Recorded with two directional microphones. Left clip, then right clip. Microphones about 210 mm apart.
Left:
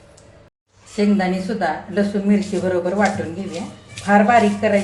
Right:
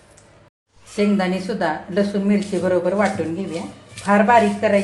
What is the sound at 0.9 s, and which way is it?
Speech, 35° right (ahead or behind).